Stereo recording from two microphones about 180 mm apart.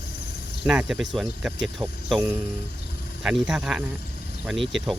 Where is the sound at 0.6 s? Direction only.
5° right (ahead or behind).